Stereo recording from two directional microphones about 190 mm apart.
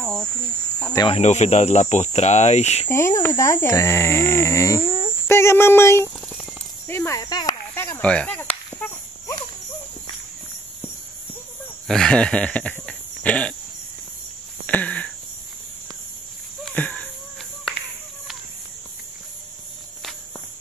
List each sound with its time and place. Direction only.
0.9 s speech: 30° left (ahead or behind)
2.9 s speech: 15° left (ahead or behind)
6.9 s cricket: 15° left (ahead or behind)
11.9 s insect: 5° left (ahead or behind)
14.7 s a sound: 10° left (ahead or behind)
16.6 s a sound: 5° left (ahead or behind)